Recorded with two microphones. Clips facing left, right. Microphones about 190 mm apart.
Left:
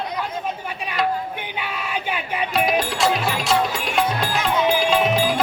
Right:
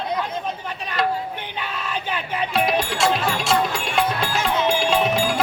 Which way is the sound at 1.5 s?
10° left (ahead or behind).